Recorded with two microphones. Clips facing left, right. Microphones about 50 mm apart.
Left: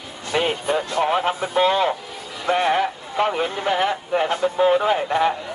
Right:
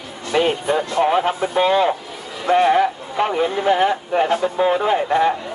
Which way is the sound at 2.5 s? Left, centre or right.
Centre.